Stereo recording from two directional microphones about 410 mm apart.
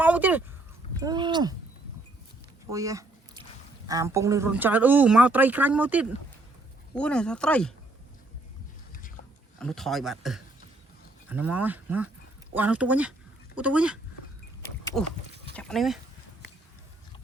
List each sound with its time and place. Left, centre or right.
0.0 s a sound: centre
0.9 s speech: centre
2.7 s a sound: centre
3.8 s speech: centre
8.9 s boat: centre
9.6 s speech: centre